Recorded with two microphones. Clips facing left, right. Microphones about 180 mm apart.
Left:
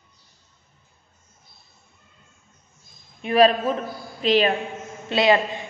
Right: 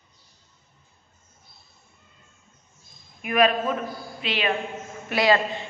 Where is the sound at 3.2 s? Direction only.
30° left (ahead or behind).